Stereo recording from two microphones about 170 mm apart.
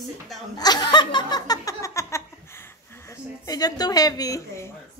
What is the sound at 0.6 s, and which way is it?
Laughter, 25° left (ahead or behind).